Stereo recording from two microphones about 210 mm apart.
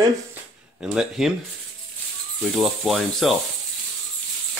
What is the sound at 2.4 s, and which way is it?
Speech, centre (ahead or behind).